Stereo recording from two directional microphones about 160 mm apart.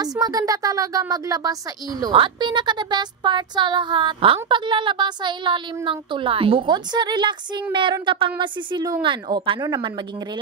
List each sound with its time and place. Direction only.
0.0 s speech: 25° right (ahead or behind)